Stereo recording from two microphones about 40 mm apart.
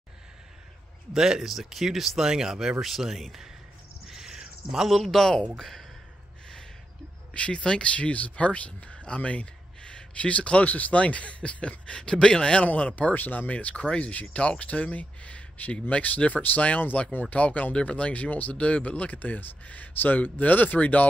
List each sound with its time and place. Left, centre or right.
1.1 s speech: centre
4.1 s a sound: centre
5.0 s speech: centre
7.3 s speech: left
13.1 s speech: left
13.5 s speech: left
13.7 s speech: left